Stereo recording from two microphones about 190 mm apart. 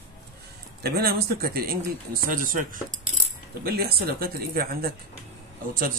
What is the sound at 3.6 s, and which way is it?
Speech, 55° right (ahead or behind).